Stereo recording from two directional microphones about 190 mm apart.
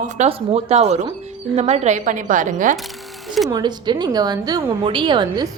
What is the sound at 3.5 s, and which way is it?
A woman's voice, 25° right (ahead or behind).